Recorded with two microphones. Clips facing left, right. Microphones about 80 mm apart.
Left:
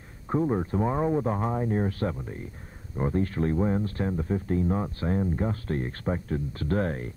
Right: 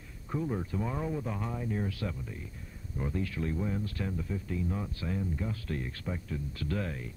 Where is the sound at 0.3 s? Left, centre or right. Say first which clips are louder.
Left 8 dB; left.